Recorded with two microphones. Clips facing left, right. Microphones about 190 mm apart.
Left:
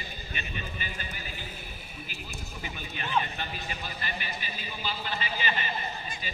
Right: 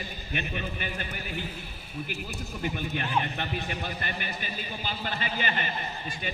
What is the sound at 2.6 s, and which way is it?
A man's voice, 55° right (ahead or behind).